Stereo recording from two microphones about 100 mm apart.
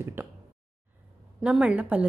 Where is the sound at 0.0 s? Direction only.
25° right (ahead or behind).